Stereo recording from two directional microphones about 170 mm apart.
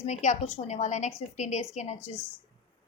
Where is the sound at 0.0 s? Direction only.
45° left (ahead or behind).